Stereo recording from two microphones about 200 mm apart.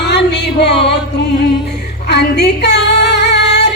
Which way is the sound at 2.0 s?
55° left (ahead or behind).